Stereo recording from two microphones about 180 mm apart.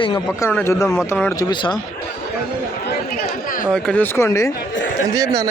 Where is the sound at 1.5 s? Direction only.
25° left (ahead or behind).